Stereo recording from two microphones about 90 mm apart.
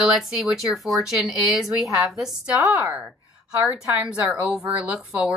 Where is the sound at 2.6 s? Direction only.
20° right (ahead or behind).